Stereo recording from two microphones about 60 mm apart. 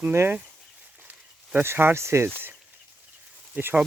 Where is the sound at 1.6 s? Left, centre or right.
Right.